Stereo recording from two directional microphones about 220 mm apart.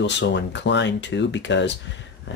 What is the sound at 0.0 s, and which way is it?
Speech, 50° left (ahead or behind).